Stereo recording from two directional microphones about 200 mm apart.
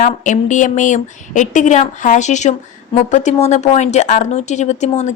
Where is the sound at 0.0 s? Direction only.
40° left (ahead or behind).